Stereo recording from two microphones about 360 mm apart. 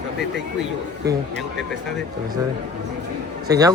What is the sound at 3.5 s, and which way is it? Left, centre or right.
Speech, centre.